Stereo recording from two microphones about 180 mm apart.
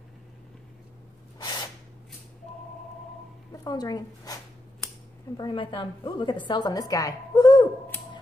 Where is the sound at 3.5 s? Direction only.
20° left (ahead or behind).